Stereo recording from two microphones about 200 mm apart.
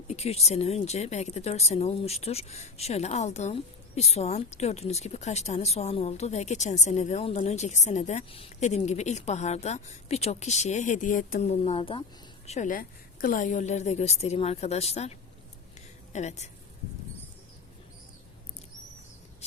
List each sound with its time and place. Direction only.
0.1 s a woman's voice: 30° left (ahead or behind)
12.5 s a woman's voice: 40° left (ahead or behind)
16.1 s a woman's voice: 35° left (ahead or behind)